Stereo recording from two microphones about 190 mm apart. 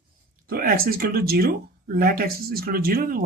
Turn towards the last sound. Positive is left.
turn(degrees=-50)  # may be behind; listen again after turning